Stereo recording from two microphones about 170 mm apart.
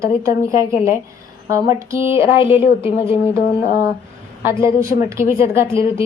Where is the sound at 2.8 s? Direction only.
30° left (ahead or behind).